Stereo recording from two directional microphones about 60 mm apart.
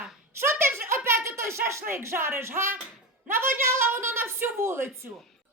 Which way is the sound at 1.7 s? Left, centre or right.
Right.